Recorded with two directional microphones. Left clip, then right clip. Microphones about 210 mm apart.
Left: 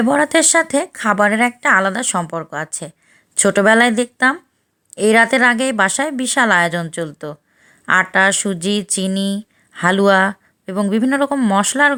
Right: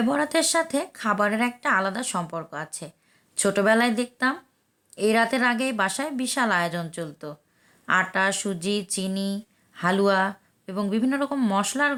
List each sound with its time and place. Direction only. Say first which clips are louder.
0.0 s speech: left 9 dB; 30° left (ahead or behind)